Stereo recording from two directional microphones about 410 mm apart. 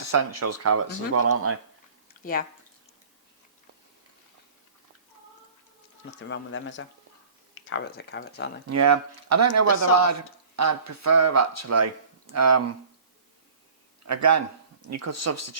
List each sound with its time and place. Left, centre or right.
0.0 s speech: right
6.1 s speech: left
8.7 s speech: right
14.0 s a man's voice: right